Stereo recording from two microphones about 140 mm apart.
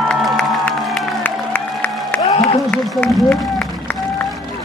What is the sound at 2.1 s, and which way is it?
Applause, 10° left (ahead or behind).